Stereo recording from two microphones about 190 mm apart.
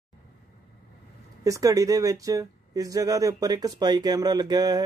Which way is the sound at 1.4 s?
15° right (ahead or behind).